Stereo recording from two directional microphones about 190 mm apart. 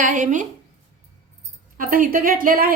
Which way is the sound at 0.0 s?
40° right (ahead or behind).